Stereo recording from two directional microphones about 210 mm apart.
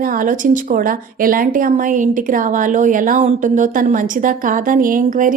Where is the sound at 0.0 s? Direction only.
40° right (ahead or behind).